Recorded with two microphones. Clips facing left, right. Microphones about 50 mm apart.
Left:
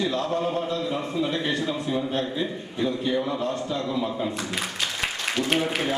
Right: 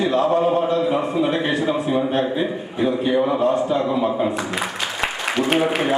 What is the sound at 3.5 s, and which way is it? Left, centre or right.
Speech, centre.